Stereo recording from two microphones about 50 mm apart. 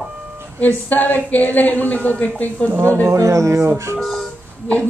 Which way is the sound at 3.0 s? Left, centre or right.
Right.